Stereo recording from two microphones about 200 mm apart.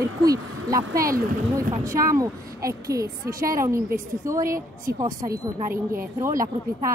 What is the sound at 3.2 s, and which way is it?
Speech, 45° right (ahead or behind).